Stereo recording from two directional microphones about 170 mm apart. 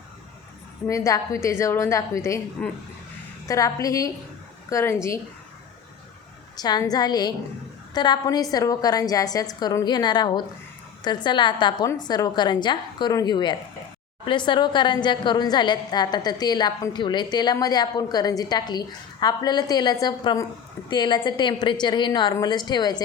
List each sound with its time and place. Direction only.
0.9 s a woman's voice: 20° left (ahead or behind)
6.6 s a woman's voice: 25° left (ahead or behind)